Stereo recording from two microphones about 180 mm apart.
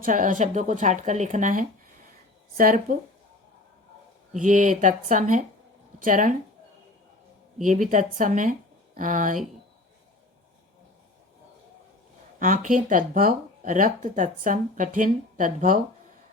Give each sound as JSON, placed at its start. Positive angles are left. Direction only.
{"t": 0.0, "sound": "speech", "side_deg": -45}
{"t": 4.3, "sound": "speech", "side_deg": -45}
{"t": 7.6, "sound": "speech", "side_deg": -45}
{"t": 12.4, "sound": "speech", "side_deg": -45}